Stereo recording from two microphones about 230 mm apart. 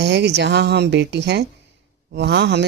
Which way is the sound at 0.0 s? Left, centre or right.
Right.